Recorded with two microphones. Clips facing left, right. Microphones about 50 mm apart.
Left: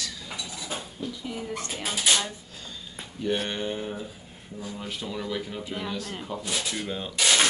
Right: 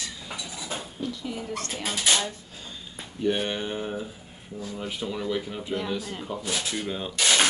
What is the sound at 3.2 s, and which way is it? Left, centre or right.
Speech, centre.